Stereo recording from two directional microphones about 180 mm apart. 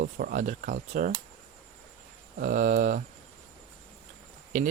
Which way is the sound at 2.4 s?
45° right (ahead or behind).